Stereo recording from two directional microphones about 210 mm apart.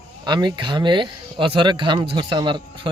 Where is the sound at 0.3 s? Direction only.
20° right (ahead or behind).